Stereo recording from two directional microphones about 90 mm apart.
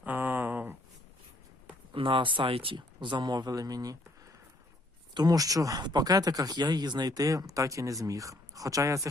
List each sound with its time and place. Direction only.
0.0 s a sound: 20° right (ahead or behind)
1.9 s speech: 75° right (ahead or behind); by 3.9 s 45° right (ahead or behind)
5.1 s speech: 45° right (ahead or behind)